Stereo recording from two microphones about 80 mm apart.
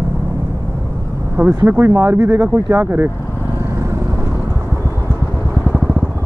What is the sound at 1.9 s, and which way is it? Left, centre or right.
Speech, right.